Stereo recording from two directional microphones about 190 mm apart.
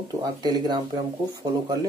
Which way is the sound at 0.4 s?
20° right (ahead or behind).